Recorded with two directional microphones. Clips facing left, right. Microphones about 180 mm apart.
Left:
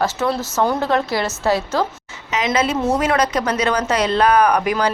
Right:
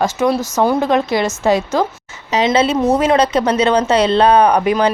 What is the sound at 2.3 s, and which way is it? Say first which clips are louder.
Speech: right 5 dB; 30° right (ahead or behind).